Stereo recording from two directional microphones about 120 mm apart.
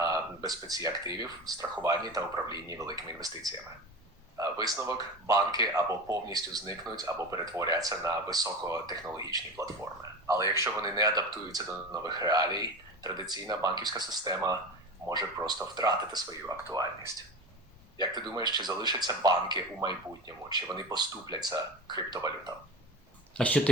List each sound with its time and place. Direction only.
0.0 s a sound: 30° right (ahead or behind)
0.9 s speech: 30° right (ahead or behind)
18.0 s speech: 35° right (ahead or behind)
23.4 s speech: 10° left (ahead or behind)